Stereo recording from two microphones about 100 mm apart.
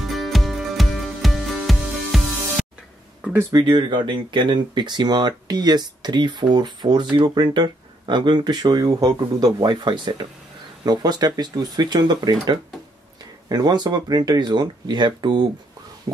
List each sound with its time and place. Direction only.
0.0 s music: centre (ahead or behind)
3.5 s speech: 50° right (ahead or behind)